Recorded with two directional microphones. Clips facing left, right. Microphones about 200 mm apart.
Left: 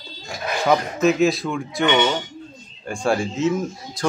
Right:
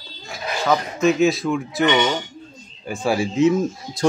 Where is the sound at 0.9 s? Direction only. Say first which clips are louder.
Even; centre (ahead or behind).